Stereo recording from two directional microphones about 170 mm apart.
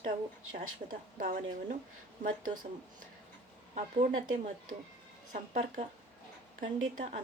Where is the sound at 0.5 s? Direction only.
55° right (ahead or behind).